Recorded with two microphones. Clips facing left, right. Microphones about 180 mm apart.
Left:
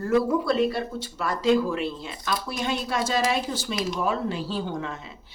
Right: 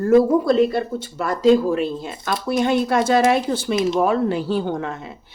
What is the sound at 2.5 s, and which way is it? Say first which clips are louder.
A woman's voice: right 12 dB; 55° right (ahead or behind).